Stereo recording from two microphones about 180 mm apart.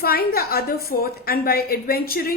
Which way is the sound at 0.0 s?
55° left (ahead or behind).